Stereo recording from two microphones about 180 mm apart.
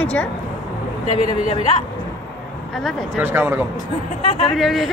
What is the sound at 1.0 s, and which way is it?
Speech, 40° left (ahead or behind).